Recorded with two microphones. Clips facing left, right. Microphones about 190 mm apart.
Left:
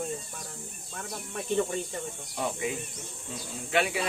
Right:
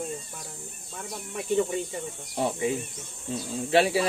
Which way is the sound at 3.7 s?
35° right (ahead or behind).